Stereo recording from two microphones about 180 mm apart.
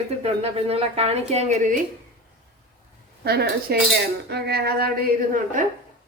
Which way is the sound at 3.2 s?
65° right (ahead or behind).